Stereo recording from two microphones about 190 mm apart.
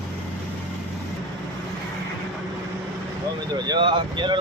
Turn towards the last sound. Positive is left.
turn(degrees=-25)  # may be behind; listen again after turning